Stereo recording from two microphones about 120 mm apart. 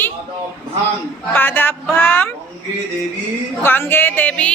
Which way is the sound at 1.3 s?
15° left (ahead or behind).